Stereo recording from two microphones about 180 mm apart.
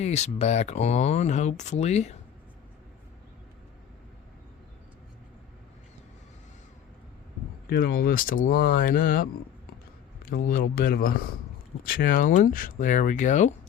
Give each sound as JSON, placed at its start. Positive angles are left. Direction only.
{"t": 0.0, "sound": "speech", "side_deg": 40}
{"t": 7.7, "sound": "speech", "side_deg": 55}